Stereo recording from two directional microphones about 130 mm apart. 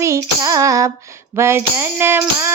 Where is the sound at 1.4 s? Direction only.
20° right (ahead or behind).